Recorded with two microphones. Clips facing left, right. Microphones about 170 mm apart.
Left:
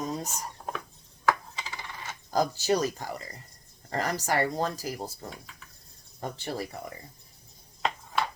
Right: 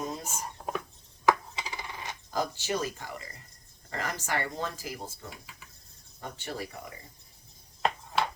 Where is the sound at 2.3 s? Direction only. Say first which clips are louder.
Left 6 dB; 40° left (ahead or behind).